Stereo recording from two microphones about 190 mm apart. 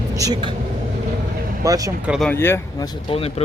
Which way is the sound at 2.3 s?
10° left (ahead or behind).